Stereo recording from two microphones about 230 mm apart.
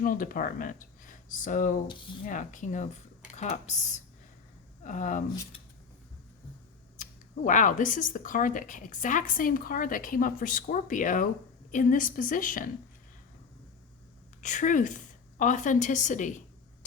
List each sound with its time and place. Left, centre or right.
0.0 s speech: left
4.8 s speech: left
6.9 s speech: left
14.4 s a woman's voice: left